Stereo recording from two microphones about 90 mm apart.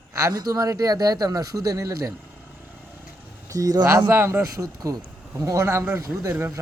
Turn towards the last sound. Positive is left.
turn(degrees=-5)  # may be behind; listen again after turning